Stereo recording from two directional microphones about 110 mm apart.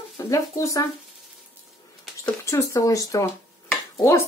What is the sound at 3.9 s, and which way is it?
Dishes, 30° left (ahead or behind).